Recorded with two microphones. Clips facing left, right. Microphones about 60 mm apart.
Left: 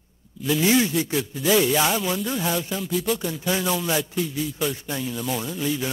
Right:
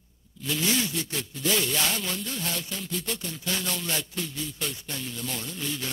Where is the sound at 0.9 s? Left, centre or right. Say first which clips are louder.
Left 9 dB; centre.